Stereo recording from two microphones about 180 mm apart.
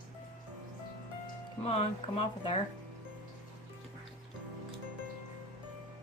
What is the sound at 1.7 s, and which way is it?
Speech, 35° left (ahead or behind).